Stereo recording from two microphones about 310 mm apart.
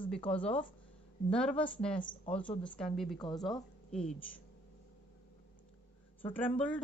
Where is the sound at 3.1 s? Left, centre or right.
Centre.